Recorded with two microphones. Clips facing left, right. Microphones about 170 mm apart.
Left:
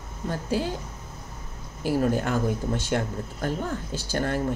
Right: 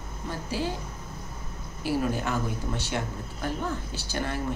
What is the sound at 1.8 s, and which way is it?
Speech, 50° left (ahead or behind).